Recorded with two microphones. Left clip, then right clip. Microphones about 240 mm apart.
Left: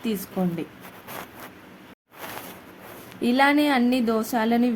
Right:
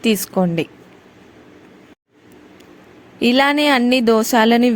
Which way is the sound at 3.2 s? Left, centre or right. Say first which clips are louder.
Right 5 dB; right.